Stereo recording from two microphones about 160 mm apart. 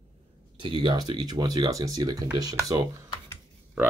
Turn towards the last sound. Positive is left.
turn(degrees=-5)  # may be behind; listen again after turning